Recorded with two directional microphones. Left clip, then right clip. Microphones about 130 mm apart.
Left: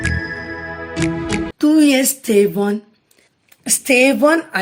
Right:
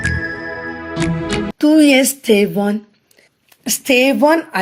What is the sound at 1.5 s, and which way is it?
A woman's voice, 30° right (ahead or behind).